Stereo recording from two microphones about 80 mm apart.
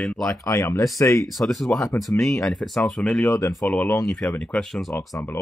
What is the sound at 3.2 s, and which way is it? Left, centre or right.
Speech, left.